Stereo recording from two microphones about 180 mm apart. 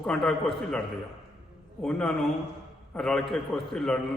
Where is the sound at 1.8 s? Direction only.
5° left (ahead or behind).